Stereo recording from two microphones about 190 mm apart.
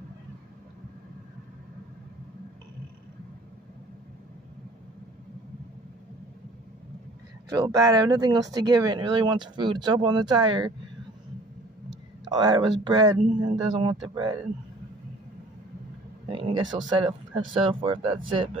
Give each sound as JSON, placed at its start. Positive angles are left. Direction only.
{"t": 7.5, "sound": "speech", "side_deg": -20}
{"t": 12.3, "sound": "speech", "side_deg": -20}
{"t": 16.3, "sound": "speech", "side_deg": -25}